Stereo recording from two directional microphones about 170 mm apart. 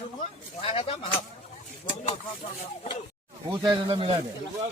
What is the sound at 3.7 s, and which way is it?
Speech, 30° right (ahead or behind).